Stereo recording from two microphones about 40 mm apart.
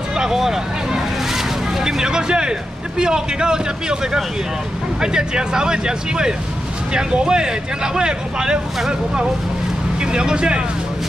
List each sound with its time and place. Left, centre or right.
0.1 s vehicle: centre
3.0 s speech: centre
9.9 s speech: right